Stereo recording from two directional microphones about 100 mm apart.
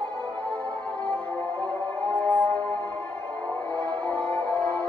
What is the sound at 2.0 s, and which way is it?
Music, 15° left (ahead or behind).